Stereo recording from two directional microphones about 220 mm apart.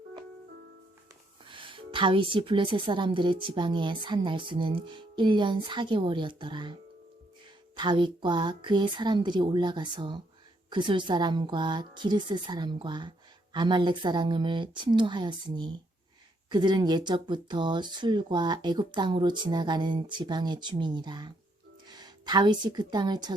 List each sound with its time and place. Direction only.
1.5 s a woman's voice: 20° right (ahead or behind)
7.8 s a woman's voice: 20° right (ahead or behind)